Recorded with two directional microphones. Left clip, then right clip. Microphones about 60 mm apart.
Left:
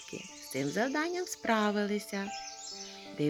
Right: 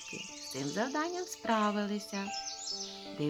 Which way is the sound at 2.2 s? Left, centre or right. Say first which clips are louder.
Right 2 dB; centre.